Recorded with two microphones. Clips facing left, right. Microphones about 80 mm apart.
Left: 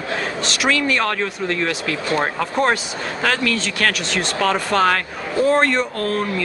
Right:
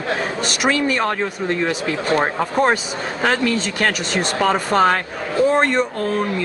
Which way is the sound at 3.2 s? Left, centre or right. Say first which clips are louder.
Right 2 dB; right.